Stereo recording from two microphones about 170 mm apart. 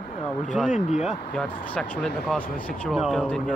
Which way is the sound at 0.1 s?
35° left (ahead or behind).